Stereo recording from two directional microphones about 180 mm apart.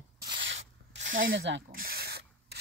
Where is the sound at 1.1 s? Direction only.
50° right (ahead or behind).